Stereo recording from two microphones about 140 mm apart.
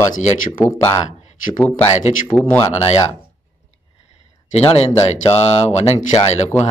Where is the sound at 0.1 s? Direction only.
55° left (ahead or behind).